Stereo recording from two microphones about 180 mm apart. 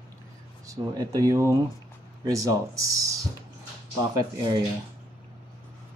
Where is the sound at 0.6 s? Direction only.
20° right (ahead or behind).